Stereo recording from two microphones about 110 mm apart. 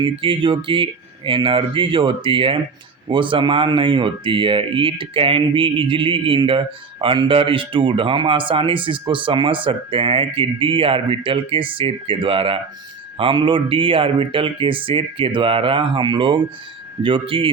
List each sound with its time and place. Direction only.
0.0 s speech: 50° right (ahead or behind)